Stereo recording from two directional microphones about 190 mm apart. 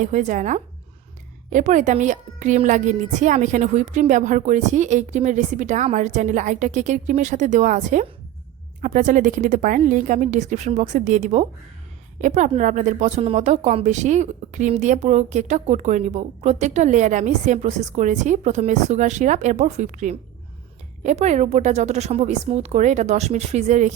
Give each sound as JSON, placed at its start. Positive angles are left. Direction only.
{"t": 0.0, "sound": "a woman's voice", "side_deg": -40}